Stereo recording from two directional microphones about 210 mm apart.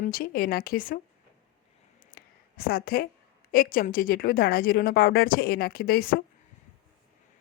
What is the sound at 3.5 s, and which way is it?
Speech, 45° left (ahead or behind).